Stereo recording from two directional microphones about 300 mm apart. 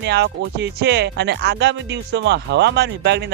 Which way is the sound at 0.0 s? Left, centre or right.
Right.